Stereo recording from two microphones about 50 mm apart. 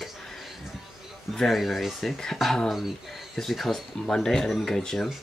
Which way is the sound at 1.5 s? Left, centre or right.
Centre.